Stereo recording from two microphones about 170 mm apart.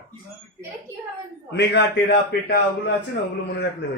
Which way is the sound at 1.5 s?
85° left.